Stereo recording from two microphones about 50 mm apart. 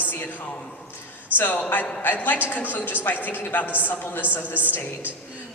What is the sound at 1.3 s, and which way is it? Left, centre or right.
A woman's voice, left.